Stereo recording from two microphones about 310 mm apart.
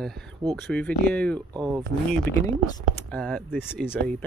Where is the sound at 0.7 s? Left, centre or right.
Centre.